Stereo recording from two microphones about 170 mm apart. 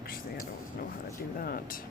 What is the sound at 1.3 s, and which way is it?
Speech, 60° left (ahead or behind).